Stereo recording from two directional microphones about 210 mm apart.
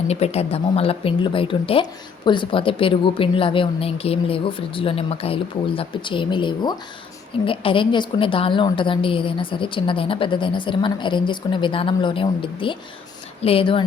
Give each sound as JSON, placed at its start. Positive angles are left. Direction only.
{"t": 0.1, "sound": "speech", "side_deg": 30}